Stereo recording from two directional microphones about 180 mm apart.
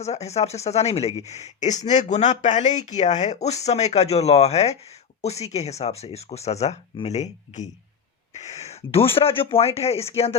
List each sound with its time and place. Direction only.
0.0 s speech: 35° left (ahead or behind)